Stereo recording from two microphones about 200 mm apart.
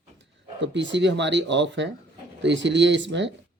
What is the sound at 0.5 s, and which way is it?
Speech, 65° right (ahead or behind).